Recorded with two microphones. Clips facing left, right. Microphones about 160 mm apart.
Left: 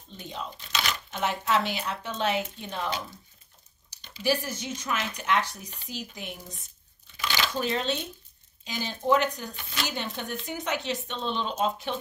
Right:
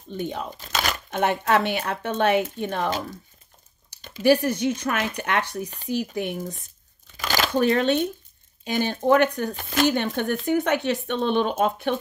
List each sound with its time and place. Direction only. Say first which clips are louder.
0.1 s speech: right 9 dB; 60° right (ahead or behind)
0.6 s speech: right 5 dB; 45° right (ahead or behind)
4.0 s speech: right 9 dB; 55° right (ahead or behind)
7.2 s shuffling cards: right 7 dB; 45° right (ahead or behind)
8.6 s speech: right 6 dB; 60° right (ahead or behind)
9.5 s speech: right 13 dB; 45° right (ahead or behind)